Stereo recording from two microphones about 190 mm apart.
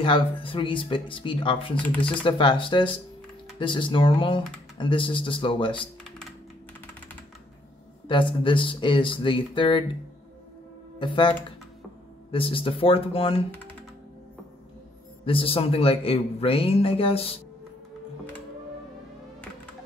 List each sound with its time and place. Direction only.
0.0 s speech: 25° left (ahead or behind)
8.1 s speech: 25° left (ahead or behind)
11.0 s speech: 25° left (ahead or behind)
15.2 s speech: 30° left (ahead or behind)